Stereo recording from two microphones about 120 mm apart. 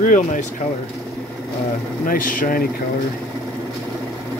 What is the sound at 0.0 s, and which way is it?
Speech, 90° left.